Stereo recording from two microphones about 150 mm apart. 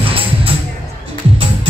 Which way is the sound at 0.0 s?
40° right (ahead or behind).